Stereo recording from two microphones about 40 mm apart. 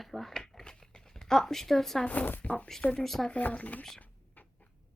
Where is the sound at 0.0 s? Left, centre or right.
Centre.